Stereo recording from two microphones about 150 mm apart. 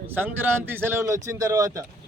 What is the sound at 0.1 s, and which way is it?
A man's voice, 15° right (ahead or behind).